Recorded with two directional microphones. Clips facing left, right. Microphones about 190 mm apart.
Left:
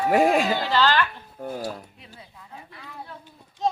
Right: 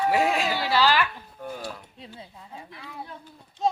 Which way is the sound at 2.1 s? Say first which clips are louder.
Right 1 dB; 25° right (ahead or behind).